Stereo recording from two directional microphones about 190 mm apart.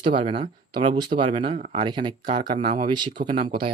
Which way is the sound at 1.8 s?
25° right (ahead or behind).